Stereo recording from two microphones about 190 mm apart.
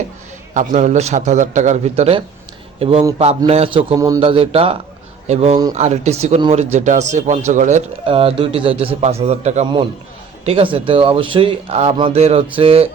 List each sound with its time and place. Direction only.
0.5 s a man's voice: 40° right (ahead or behind)
3.9 s a man's voice: 15° right (ahead or behind)
4.2 s speech: 30° right (ahead or behind)